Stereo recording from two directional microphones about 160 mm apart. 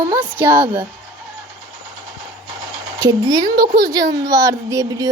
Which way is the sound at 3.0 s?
25° right (ahead or behind).